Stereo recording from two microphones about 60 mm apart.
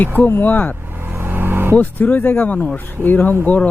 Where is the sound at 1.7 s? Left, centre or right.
Left.